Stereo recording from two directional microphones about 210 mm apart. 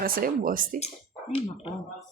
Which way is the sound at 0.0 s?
45° right (ahead or behind).